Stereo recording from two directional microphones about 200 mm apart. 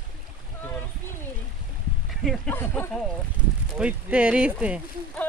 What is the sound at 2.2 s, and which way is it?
Speech, centre (ahead or behind).